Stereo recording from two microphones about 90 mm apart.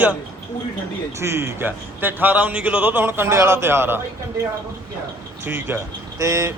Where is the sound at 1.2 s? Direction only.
30° right (ahead or behind).